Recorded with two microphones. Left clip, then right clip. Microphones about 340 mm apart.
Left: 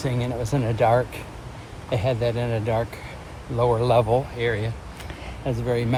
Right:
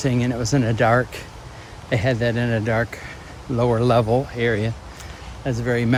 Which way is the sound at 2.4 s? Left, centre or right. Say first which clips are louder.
Right 3 dB; right.